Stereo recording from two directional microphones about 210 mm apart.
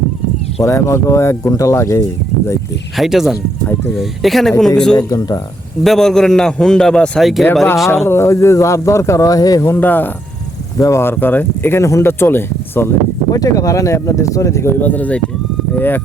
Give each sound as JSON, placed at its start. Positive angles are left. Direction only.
{"t": 0.6, "sound": "speech", "side_deg": 15}
{"t": 3.0, "sound": "a man's voice", "side_deg": 0}
{"t": 4.9, "sound": "speech", "side_deg": 15}
{"t": 5.8, "sound": "a man's voice", "side_deg": 0}
{"t": 8.0, "sound": "speech", "side_deg": 10}